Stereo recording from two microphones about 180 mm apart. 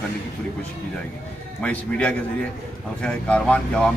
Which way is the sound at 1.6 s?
5° left (ahead or behind).